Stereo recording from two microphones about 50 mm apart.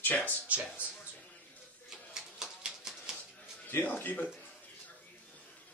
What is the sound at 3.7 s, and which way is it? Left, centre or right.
Speech, left.